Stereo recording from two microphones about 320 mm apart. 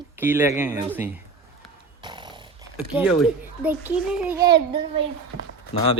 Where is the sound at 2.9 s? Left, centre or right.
Centre.